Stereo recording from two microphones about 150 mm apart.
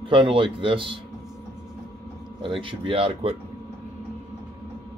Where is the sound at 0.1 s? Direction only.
35° right (ahead or behind).